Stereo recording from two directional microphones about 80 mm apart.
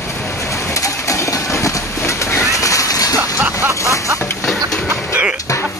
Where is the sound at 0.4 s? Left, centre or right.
Left.